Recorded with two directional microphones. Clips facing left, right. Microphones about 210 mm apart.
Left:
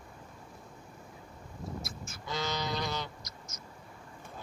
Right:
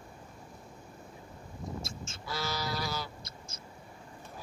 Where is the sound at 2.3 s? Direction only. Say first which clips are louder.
Left 1 dB; 5° right (ahead or behind).